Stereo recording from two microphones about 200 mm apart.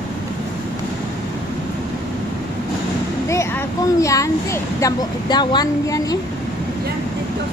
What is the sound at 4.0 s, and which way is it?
Speech, 15° left (ahead or behind).